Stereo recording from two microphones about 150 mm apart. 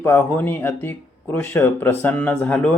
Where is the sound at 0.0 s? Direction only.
15° left (ahead or behind).